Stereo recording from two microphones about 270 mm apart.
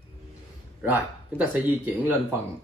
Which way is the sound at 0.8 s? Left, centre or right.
Centre.